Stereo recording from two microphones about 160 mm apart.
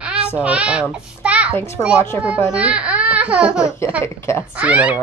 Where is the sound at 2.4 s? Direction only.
10° right (ahead or behind).